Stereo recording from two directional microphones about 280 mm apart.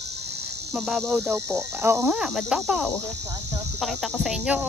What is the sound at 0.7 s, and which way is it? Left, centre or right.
Speech, centre.